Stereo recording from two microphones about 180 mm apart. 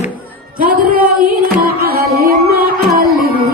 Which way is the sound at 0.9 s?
50° right (ahead or behind).